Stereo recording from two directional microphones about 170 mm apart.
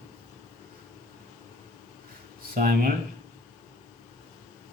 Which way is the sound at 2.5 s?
55° right (ahead or behind).